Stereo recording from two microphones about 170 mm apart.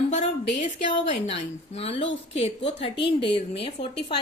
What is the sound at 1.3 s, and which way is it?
A woman's voice, 35° left (ahead or behind).